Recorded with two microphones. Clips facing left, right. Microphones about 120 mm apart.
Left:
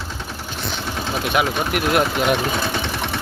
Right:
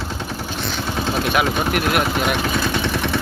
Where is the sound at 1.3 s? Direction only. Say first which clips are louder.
Left 1 dB; 20° left (ahead or behind).